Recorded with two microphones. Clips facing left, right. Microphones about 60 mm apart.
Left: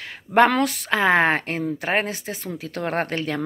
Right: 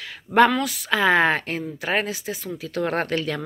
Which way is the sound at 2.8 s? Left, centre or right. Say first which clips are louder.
Even; left.